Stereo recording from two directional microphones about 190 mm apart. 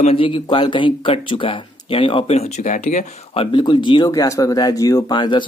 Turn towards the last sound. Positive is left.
turn(degrees=25)  # may be behind; listen again after turning